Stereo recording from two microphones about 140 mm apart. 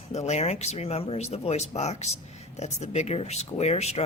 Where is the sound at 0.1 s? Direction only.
55° left (ahead or behind).